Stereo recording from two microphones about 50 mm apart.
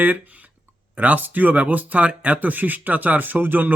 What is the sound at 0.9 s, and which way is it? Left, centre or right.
Speech, right.